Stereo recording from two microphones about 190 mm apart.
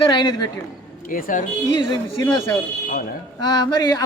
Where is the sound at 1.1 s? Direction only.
45° left (ahead or behind).